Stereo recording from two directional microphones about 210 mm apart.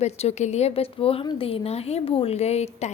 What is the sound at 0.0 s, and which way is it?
Speech, 30° left (ahead or behind).